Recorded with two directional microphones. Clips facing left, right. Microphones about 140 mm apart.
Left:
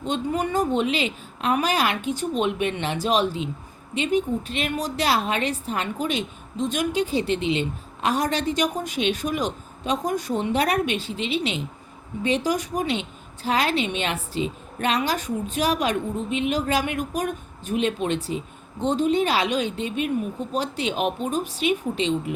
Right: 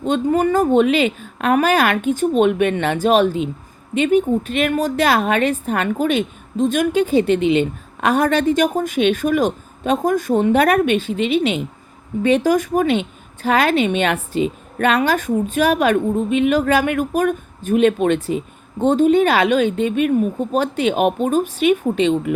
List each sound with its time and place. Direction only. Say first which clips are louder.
0.0 s a woman's voice: right 8 dB; 50° right (ahead or behind)